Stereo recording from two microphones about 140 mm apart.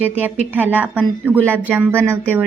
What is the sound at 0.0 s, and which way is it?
A woman's voice, 10° right (ahead or behind).